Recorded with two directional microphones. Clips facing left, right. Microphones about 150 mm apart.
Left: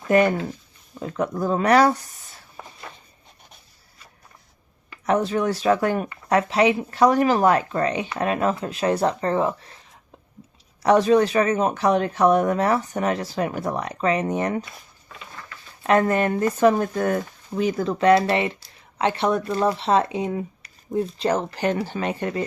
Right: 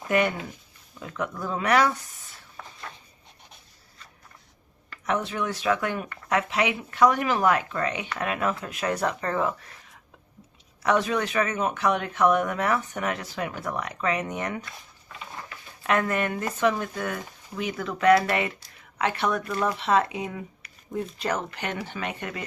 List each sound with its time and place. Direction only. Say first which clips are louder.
0.9 s speech: left 7 dB; 35° left (ahead or behind)
2.6 s a sound: left 2 dB; 20° left (ahead or behind)
5.0 s speech: left 7 dB; 35° left (ahead or behind)
10.8 s speech: left 8 dB; 35° left (ahead or behind)
15.8 s speech: left 6 dB; 30° left (ahead or behind)
16.6 s speech: left 6 dB; 45° left (ahead or behind)
17.5 s speech: left 8 dB; 35° left (ahead or behind)